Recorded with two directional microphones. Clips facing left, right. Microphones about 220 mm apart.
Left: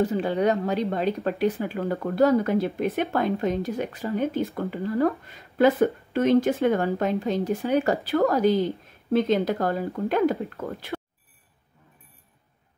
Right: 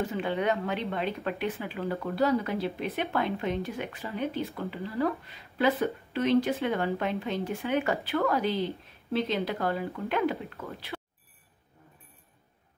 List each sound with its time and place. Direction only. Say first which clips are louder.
0.0 s speech: left 6 dB; 40° left (ahead or behind)